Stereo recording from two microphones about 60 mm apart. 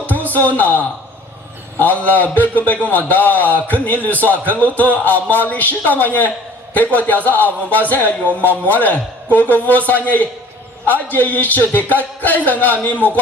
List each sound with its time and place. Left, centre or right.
0.1 s a man's voice: left
2.0 s a man's voice: left